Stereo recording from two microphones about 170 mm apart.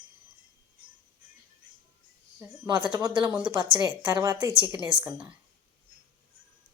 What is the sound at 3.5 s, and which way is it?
Speech, 30° right (ahead or behind).